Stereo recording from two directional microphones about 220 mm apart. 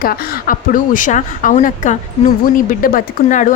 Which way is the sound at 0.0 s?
40° left (ahead or behind).